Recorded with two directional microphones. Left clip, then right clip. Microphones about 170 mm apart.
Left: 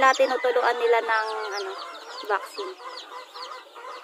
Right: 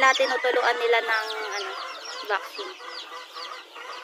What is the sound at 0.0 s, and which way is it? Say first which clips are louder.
Speech: left 1 dB; 40° left (ahead or behind).